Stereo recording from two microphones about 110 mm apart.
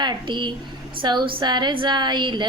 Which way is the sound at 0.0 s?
45° right (ahead or behind).